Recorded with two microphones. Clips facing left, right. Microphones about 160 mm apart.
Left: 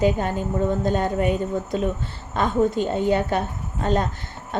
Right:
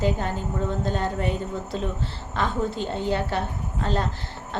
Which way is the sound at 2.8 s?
15° left (ahead or behind).